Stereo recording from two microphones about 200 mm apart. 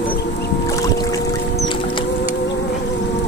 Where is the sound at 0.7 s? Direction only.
15° left (ahead or behind).